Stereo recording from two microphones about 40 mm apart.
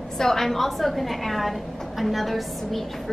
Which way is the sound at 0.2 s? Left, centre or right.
Centre.